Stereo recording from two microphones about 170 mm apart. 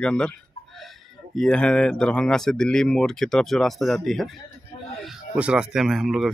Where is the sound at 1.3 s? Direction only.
5° left (ahead or behind).